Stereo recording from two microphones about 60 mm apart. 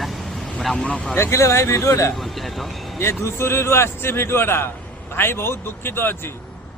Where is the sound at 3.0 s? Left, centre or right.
Left.